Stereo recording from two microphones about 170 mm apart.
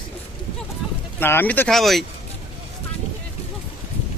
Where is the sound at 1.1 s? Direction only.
15° left (ahead or behind).